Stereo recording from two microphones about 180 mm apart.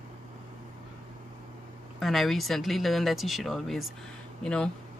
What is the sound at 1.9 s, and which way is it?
Speech, centre (ahead or behind).